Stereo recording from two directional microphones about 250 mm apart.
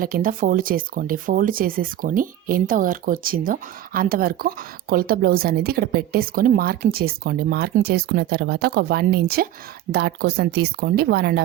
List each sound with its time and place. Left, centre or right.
0.0 s speech: right